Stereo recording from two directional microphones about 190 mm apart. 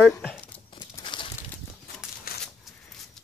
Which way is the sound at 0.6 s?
25° left (ahead or behind).